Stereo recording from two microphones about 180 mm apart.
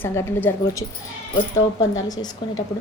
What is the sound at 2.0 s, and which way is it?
Speech, 20° left (ahead or behind).